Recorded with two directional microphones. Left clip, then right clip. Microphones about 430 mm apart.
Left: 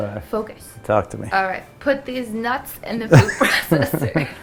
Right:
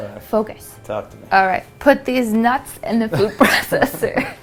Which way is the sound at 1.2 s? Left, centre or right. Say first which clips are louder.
Right 6 dB; right.